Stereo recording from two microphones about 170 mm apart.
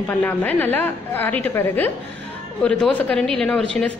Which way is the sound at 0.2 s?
10° left (ahead or behind).